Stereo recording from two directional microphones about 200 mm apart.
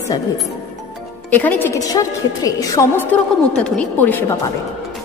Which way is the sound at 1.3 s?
10° left (ahead or behind).